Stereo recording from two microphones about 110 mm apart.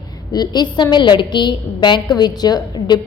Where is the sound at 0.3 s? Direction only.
40° left (ahead or behind).